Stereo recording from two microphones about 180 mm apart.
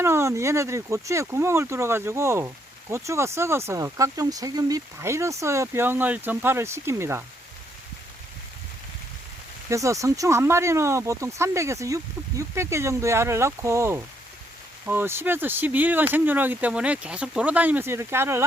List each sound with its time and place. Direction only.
0.0 s speech: 15° right (ahead or behind)
9.6 s speech: 15° right (ahead or behind)